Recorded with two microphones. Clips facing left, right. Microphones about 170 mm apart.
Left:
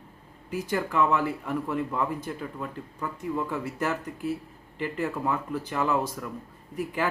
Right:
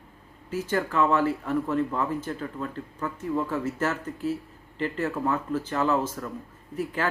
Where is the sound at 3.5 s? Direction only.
15° left (ahead or behind).